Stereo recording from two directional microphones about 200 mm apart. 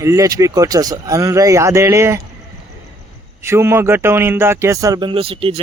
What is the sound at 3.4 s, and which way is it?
A man's voice, 15° right (ahead or behind).